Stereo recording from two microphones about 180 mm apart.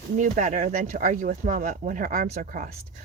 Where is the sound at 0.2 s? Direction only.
45° right (ahead or behind).